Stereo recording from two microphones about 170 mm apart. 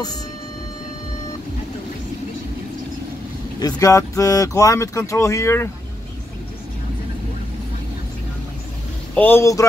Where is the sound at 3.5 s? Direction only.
20° left (ahead or behind).